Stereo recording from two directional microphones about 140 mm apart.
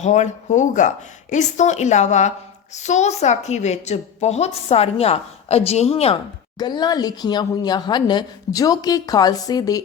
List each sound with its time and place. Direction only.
0.0 s a woman's voice: 55° left (ahead or behind)
6.6 s a woman's voice: 30° left (ahead or behind)